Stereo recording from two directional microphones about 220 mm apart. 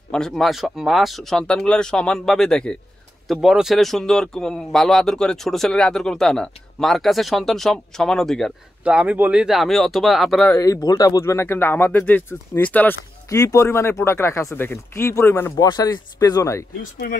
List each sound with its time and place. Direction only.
0.1 s a man's voice: centre (ahead or behind)
10.6 s speech: 15° left (ahead or behind)
17.0 s speech: 45° left (ahead or behind)